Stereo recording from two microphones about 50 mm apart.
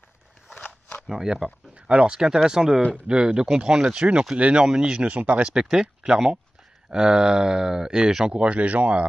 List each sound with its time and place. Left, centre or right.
0.7 s a sound: left
1.0 s speech: centre; by 5.5 s right
5.5 s speech: centre
8.4 s speech: right